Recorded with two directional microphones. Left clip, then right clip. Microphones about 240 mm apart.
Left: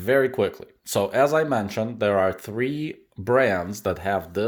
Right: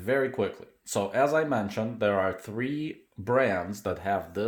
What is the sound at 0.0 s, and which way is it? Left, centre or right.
Speech, left.